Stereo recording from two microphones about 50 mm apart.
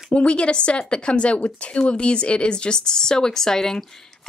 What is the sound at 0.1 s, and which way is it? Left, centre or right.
Speech, left.